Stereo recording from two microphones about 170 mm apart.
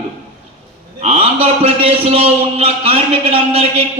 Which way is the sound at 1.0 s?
35° right (ahead or behind).